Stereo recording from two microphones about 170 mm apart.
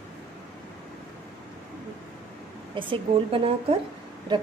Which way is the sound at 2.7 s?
30° right (ahead or behind).